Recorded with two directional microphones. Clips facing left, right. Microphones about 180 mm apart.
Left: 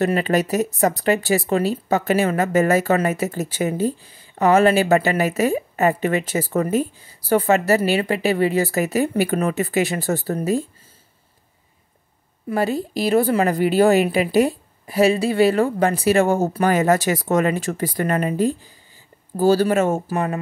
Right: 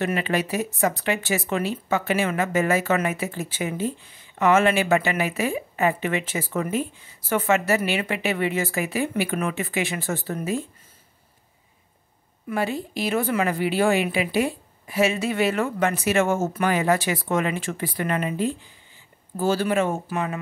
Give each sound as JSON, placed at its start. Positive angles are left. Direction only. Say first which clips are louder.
{"t": 0.0, "sound": "speech", "louder": "left 5 dB", "side_deg": 40}
{"t": 12.4, "sound": "speech", "louder": "left 5 dB", "side_deg": 40}